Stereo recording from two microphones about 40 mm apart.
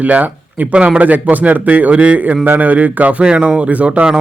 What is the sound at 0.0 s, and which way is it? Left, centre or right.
A man's voice, right.